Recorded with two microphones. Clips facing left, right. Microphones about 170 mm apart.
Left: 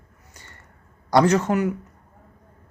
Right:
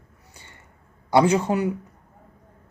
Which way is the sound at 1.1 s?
10° right (ahead or behind).